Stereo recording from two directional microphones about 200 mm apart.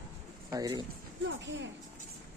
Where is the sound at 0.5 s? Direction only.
20° right (ahead or behind).